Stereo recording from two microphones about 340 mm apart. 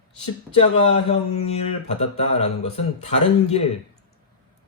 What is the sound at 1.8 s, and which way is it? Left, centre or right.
Speech, centre.